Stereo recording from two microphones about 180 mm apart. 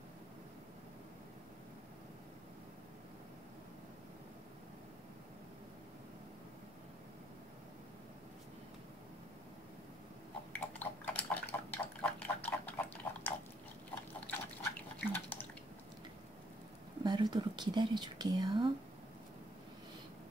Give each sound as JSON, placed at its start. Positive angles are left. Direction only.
{"t": 10.5, "sound": "pig", "side_deg": 5}
{"t": 14.2, "sound": "drip", "side_deg": 10}
{"t": 17.0, "sound": "speech", "side_deg": -25}